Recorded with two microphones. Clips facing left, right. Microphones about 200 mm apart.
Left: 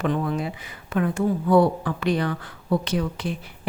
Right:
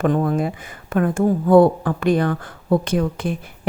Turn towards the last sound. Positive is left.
turn(degrees=-50)  # may be behind; listen again after turning